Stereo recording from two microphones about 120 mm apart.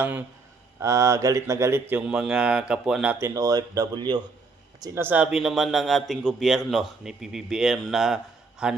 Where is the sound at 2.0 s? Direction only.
5° right (ahead or behind).